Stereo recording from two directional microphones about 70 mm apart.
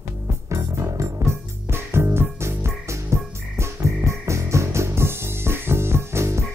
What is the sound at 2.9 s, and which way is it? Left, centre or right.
Frog, right.